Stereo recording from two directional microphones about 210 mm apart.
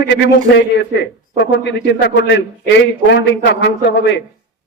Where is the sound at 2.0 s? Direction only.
55° left (ahead or behind).